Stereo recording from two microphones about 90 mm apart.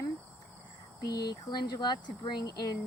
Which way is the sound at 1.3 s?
50° left (ahead or behind).